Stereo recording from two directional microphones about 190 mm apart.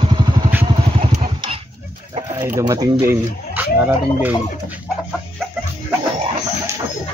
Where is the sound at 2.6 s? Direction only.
20° right (ahead or behind).